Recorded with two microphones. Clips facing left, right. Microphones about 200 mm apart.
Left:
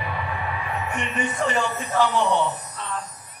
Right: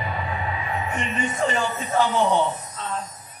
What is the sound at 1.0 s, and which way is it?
A man's voice, 70° left (ahead or behind).